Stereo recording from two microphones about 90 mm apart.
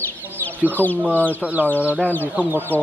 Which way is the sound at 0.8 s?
20° left (ahead or behind).